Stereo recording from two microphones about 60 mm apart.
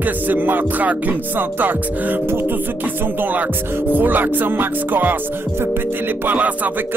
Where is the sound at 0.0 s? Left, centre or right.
Right.